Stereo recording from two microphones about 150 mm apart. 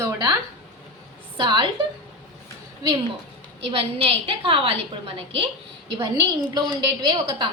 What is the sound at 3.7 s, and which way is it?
A woman's voice, 40° right (ahead or behind).